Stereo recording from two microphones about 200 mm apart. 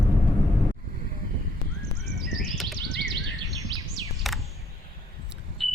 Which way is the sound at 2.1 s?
Centre (ahead or behind).